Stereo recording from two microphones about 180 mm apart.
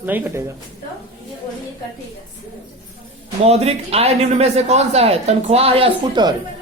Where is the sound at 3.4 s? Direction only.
35° right (ahead or behind).